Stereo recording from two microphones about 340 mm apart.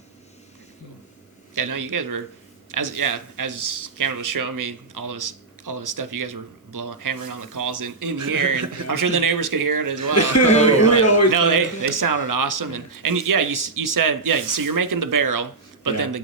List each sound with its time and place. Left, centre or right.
1.5 s a man's voice: right
10.4 s a man's voice: centre
11.3 s a man's voice: right